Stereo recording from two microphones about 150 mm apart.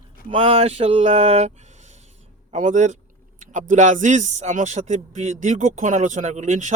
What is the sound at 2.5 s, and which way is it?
A man's voice, 55° right (ahead or behind).